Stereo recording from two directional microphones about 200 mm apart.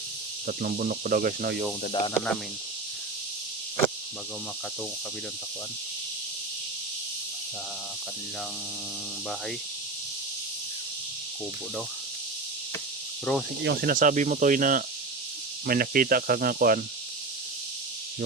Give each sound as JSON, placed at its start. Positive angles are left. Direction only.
{"t": 0.4, "sound": "speech", "side_deg": -45}
{"t": 1.9, "sound": "speech", "side_deg": 25}
{"t": 13.3, "sound": "speech", "side_deg": 0}
{"t": 13.7, "sound": "speech", "side_deg": -45}